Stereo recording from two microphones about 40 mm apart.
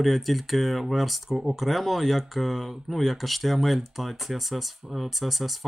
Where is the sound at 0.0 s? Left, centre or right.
Centre.